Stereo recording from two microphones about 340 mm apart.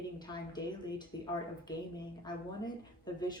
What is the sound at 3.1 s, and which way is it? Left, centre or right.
Speech, centre.